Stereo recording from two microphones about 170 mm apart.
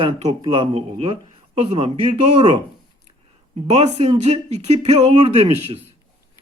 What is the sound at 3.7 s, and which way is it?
Speech, 40° right (ahead or behind).